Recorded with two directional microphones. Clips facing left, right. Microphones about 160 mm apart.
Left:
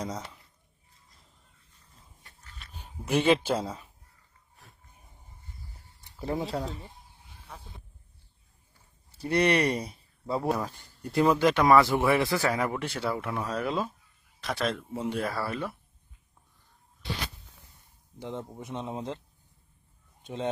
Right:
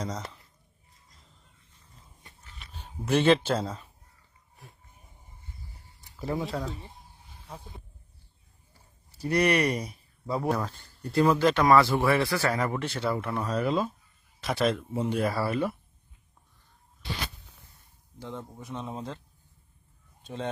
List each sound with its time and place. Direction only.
0.0 s speech: 10° left (ahead or behind)
2.2 s dog: 15° right (ahead or behind)
2.7 s speech: 10° left (ahead or behind)
6.1 s speech: 30° left (ahead or behind)
9.1 s speech: 25° left (ahead or behind)
10.5 s speech: 10° left (ahead or behind)
18.2 s speech: 20° left (ahead or behind)
20.2 s speech: 15° left (ahead or behind)